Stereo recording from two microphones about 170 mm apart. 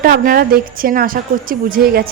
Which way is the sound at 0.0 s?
60° right (ahead or behind).